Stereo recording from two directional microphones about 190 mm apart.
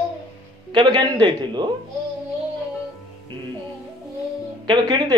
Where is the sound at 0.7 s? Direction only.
25° right (ahead or behind).